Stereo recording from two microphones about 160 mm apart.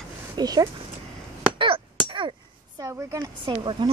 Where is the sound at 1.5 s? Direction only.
30° right (ahead or behind).